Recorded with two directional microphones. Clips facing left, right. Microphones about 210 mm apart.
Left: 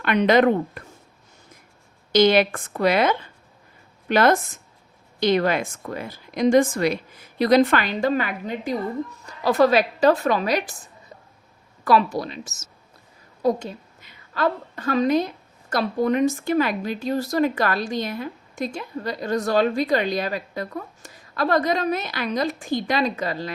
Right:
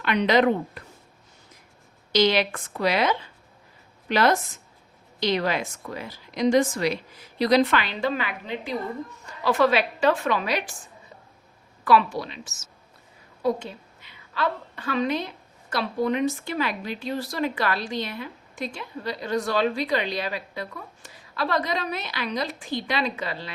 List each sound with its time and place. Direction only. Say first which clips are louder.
0.0 s speech: left 3 dB; 50° left (ahead or behind)
2.1 s a woman's voice: left 5 dB; 50° left (ahead or behind)
11.9 s a woman's voice: left 1 dB; 40° left (ahead or behind)